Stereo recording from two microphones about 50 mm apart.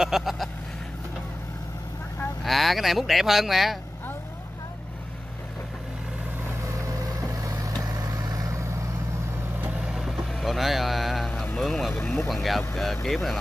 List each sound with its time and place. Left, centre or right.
0.0 s vehicle: centre
2.4 s speech: centre
7.2 s vehicle: right
9.8 s vehicle: centre
11.6 s speech: centre